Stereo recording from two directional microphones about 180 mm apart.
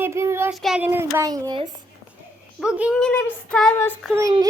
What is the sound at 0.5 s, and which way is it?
A child's voice, centre (ahead or behind).